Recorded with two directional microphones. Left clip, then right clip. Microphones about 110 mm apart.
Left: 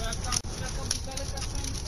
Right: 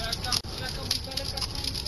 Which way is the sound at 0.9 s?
Centre (ahead or behind).